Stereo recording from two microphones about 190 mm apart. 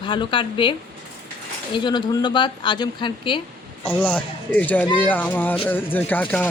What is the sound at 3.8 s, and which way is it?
Speech, 10° left (ahead or behind).